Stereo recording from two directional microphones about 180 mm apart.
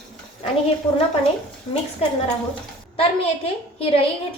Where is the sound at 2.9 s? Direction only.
35° left (ahead or behind).